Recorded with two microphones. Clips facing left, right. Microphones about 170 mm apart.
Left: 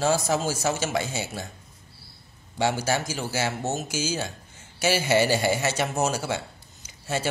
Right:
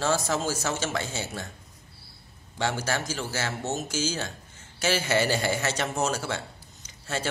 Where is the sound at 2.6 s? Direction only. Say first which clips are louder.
Left 4 dB; 10° left (ahead or behind).